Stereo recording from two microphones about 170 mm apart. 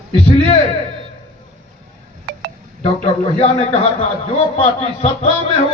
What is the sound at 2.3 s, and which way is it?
Wind chime, 80° right.